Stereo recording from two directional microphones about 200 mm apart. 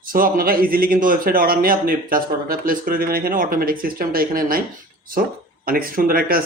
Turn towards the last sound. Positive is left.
turn(degrees=-45)  # may be behind; listen again after turning